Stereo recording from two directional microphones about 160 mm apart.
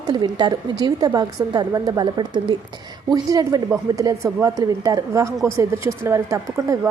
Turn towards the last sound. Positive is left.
turn(degrees=-15)  # may be behind; listen again after turning